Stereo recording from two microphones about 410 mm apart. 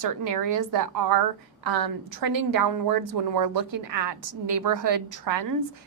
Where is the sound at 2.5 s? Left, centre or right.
Right.